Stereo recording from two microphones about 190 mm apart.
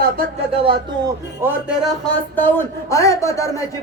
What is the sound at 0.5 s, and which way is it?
Speech, 25° right (ahead or behind).